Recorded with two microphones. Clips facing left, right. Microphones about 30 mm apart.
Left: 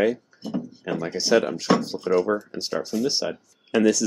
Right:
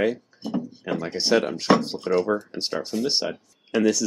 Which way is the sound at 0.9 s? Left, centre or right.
Centre.